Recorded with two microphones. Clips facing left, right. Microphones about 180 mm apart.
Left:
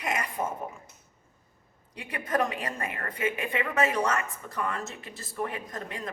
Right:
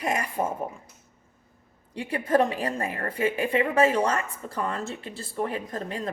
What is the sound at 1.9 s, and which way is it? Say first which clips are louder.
A woman's voice: right 7 dB; 30° right (ahead or behind).